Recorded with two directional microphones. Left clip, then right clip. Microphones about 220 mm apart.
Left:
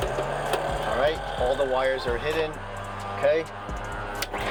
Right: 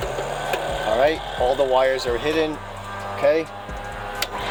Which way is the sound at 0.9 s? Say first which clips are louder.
Right 6 dB; 55° right (ahead or behind).